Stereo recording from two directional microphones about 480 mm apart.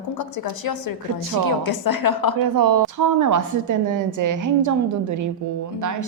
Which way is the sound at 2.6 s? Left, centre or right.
Right.